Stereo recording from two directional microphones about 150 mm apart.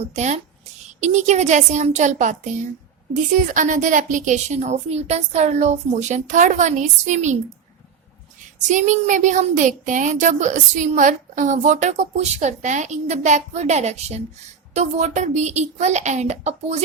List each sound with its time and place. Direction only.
0.0 s speech: 50° right (ahead or behind)
8.6 s speech: 55° right (ahead or behind)